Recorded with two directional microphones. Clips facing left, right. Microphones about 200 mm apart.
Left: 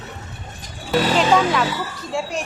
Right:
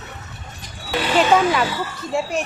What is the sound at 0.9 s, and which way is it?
Speech, 40° left (ahead or behind).